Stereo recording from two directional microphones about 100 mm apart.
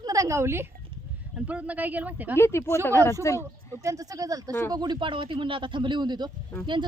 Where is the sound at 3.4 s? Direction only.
35° right (ahead or behind).